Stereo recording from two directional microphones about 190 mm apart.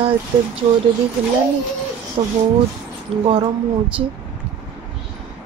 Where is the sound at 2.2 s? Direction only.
30° right (ahead or behind).